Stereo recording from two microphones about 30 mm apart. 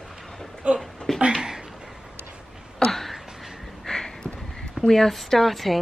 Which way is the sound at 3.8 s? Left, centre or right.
Left.